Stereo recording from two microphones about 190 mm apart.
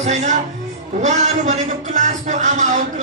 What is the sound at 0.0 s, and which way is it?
A man's voice, 40° right (ahead or behind).